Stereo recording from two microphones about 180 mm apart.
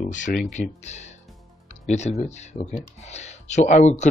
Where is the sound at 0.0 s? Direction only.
45° left (ahead or behind).